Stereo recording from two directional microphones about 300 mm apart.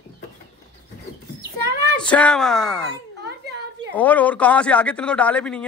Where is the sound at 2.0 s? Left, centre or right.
Centre.